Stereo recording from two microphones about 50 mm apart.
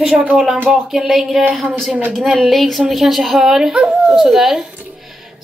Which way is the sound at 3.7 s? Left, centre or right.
Right.